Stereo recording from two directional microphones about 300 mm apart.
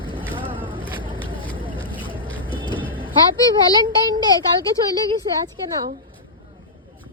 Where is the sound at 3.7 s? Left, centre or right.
Centre.